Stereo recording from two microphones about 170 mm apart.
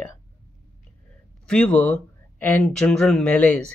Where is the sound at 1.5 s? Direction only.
5° left (ahead or behind).